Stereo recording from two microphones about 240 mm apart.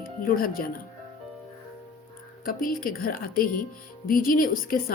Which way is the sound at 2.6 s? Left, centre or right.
Left.